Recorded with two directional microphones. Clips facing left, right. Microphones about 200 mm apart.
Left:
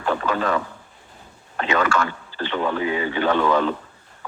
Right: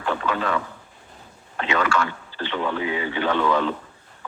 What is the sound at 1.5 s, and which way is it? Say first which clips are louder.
Speech: left 2 dB; 45° left (ahead or behind).